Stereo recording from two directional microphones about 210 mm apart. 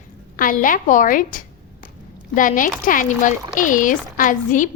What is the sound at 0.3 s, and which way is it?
A woman's voice, 40° left (ahead or behind).